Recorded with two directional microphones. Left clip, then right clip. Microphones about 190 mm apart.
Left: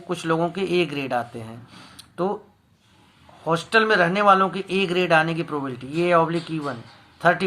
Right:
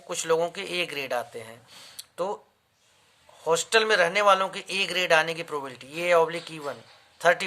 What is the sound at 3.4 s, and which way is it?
Speech, 45° right (ahead or behind).